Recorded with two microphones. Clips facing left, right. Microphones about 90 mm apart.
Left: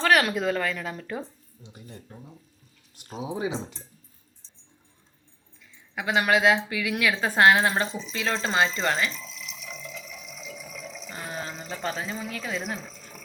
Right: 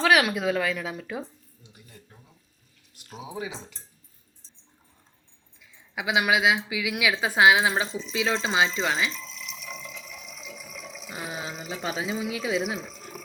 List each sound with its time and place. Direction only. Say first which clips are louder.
0.0 s speech: even; 5° right (ahead or behind)
3.0 s speech: left 5 dB; 30° left (ahead or behind)
5.9 s a woman's voice: left 1 dB; 5° right (ahead or behind)